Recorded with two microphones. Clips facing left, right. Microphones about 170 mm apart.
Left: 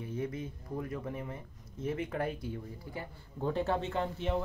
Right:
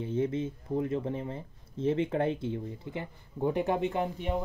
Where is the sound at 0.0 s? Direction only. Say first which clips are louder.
Right 7 dB; 25° right (ahead or behind).